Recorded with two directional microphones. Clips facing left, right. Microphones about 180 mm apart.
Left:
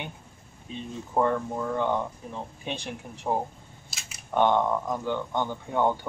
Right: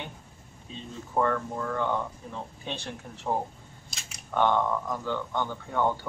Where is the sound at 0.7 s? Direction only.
15° left (ahead or behind).